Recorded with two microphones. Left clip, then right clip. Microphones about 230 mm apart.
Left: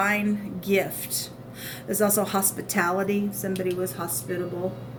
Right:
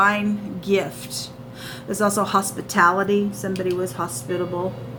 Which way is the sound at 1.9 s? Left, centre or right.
Left.